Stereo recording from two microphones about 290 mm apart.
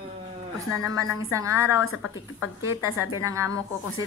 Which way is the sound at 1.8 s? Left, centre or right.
Left.